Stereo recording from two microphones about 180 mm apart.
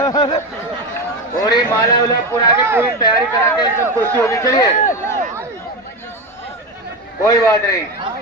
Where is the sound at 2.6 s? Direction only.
15° right (ahead or behind).